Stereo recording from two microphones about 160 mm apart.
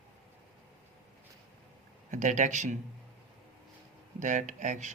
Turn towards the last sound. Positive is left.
turn(degrees=-50)  # may be behind; listen again after turning